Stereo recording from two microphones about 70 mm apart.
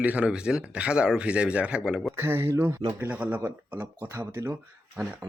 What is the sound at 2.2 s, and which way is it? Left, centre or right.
Speech, right.